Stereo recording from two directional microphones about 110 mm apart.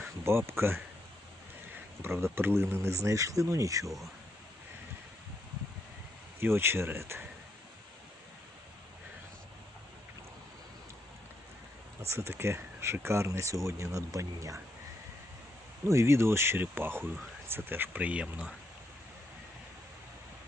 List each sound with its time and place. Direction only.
0.0 s speech: 20° right (ahead or behind)
2.0 s speech: 20° right (ahead or behind)
3.8 s speech: centre (ahead or behind)
6.4 s speech: 20° right (ahead or behind)
12.0 s speech: 25° right (ahead or behind)
15.9 s speech: 25° right (ahead or behind); by 18.5 s 10° right (ahead or behind)